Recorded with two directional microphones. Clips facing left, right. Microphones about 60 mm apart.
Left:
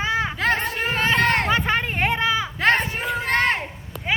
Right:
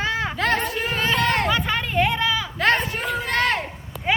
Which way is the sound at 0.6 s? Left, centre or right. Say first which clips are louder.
Left 1 dB; left.